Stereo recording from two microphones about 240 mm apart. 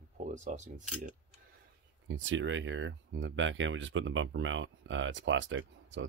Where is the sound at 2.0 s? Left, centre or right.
Right.